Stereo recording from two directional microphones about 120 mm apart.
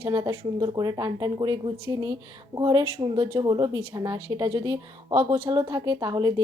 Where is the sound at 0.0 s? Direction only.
35° right (ahead or behind).